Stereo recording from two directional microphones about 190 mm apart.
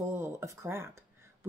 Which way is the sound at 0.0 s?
15° right (ahead or behind).